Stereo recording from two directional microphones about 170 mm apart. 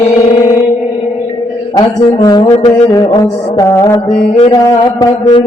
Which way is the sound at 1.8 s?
20° left (ahead or behind).